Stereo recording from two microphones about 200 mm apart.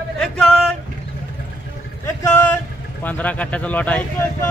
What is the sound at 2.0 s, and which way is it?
Speech, 10° left (ahead or behind).